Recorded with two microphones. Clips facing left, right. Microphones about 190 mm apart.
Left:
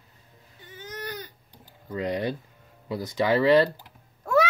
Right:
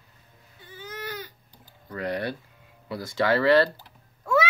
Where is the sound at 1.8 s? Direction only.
15° left (ahead or behind).